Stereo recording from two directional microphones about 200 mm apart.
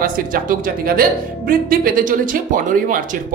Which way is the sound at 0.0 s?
45° right (ahead or behind).